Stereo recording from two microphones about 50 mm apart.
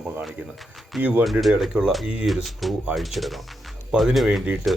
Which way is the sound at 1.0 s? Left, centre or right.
Right.